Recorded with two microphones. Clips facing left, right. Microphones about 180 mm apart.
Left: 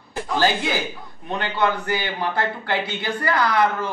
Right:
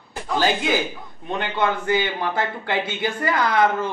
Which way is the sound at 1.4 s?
20° right (ahead or behind).